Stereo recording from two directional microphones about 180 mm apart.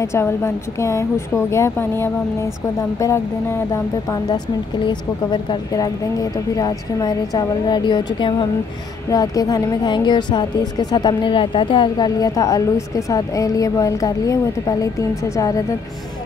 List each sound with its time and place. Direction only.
0.0 s a woman's voice: 15° left (ahead or behind)